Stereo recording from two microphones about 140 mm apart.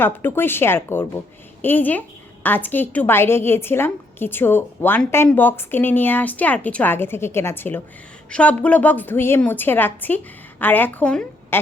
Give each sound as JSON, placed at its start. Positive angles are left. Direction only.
{"t": 0.0, "sound": "a woman's voice", "side_deg": 15}